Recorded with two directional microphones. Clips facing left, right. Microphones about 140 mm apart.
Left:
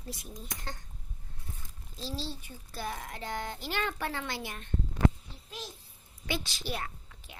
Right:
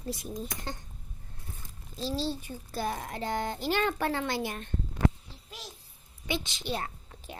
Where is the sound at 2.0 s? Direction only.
45° right (ahead or behind).